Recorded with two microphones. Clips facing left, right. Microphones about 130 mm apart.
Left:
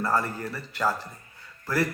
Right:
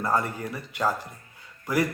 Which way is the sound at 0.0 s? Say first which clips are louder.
Even; 15° right (ahead or behind).